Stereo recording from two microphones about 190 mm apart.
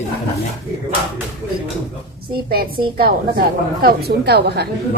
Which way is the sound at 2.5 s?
50° right (ahead or behind).